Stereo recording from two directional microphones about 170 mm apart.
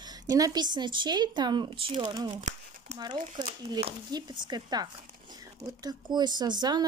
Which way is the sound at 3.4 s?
25° right (ahead or behind).